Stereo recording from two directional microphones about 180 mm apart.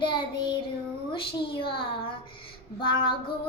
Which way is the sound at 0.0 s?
25° left (ahead or behind).